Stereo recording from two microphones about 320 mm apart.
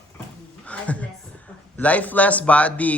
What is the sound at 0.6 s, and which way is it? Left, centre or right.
Speech, centre.